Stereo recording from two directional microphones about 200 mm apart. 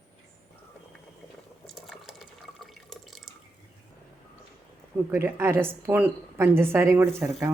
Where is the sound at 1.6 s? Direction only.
Centre (ahead or behind).